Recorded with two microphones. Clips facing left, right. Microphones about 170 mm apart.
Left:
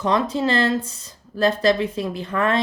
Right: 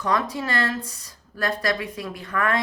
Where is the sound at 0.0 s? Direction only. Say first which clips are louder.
Left 5 dB; 25° left (ahead or behind).